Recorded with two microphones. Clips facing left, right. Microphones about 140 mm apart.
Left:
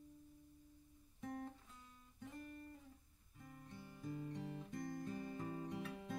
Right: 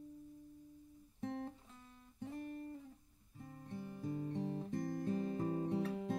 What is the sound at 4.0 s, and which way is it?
Guitar, 30° right (ahead or behind).